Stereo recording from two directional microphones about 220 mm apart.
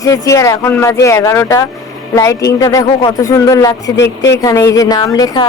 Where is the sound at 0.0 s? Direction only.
15° left (ahead or behind).